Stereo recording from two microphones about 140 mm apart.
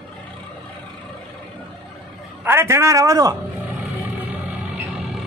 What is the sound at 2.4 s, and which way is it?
Speech, 15° right (ahead or behind).